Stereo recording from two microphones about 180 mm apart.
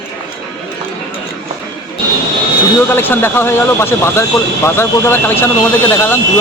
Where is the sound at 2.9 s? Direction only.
10° left (ahead or behind).